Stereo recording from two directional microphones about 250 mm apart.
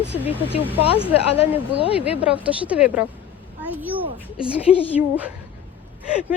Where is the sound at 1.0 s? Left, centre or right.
Left.